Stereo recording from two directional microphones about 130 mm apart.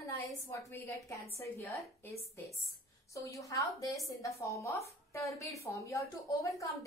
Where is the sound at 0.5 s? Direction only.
20° left (ahead or behind).